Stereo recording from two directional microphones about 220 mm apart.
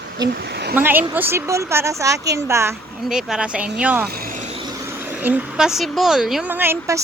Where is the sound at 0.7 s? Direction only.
10° right (ahead or behind).